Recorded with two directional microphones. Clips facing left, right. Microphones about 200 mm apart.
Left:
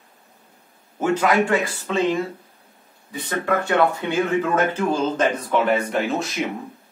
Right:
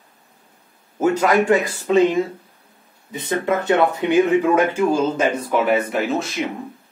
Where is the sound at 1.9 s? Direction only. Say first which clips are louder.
Right 7 dB; 20° right (ahead or behind); by 6.4 s centre (ahead or behind).